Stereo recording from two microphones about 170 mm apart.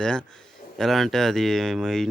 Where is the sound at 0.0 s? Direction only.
5° left (ahead or behind).